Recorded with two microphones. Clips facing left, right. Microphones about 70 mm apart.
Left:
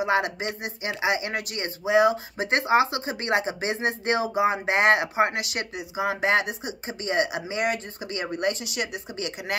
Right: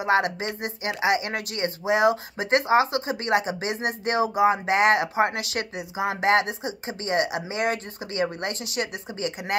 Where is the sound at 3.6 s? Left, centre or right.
Left.